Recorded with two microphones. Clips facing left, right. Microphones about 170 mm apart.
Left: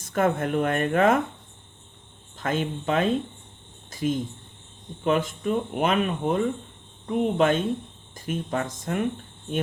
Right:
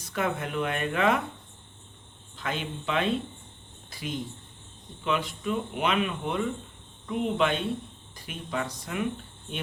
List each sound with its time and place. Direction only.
0.0 s speech: 50° left (ahead or behind)
2.4 s speech: 45° left (ahead or behind)
3.8 s cricket: 45° left (ahead or behind)
5.0 s speech: 45° left (ahead or behind)